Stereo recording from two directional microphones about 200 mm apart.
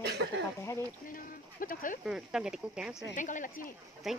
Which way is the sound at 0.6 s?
15° left (ahead or behind).